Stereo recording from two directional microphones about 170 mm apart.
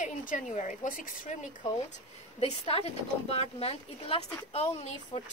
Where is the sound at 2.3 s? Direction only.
35° left (ahead or behind).